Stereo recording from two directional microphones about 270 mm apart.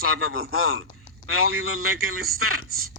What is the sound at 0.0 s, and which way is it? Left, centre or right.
A man's voice, right.